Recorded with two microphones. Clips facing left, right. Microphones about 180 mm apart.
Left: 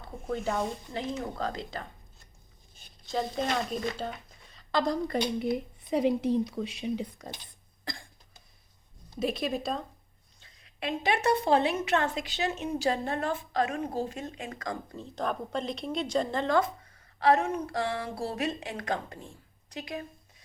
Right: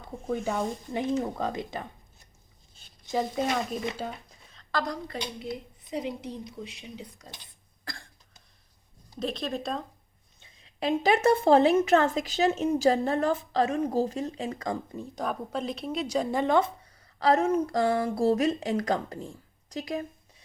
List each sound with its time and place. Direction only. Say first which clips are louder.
0.0 s a woman's voice: right 2 dB; 15° right (ahead or behind)
4.7 s a woman's voice: left 3 dB; 25° left (ahead or behind)
5.0 s speech: left 7 dB; 55° left (ahead or behind)
9.1 s speech: left 1 dB; 10° left (ahead or behind)
10.4 s a sound: right 6 dB; 20° right (ahead or behind)
11.0 s speech: right 4 dB; 45° right (ahead or behind); by 14.8 s 30° right (ahead or behind)
14.8 s a woman's voice: even; 10° right (ahead or behind)
17.2 s speech: right 2 dB; 40° right (ahead or behind)